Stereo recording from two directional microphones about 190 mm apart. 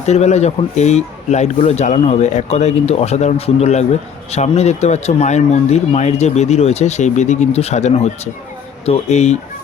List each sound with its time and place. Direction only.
0.0 s speech: 35° left (ahead or behind)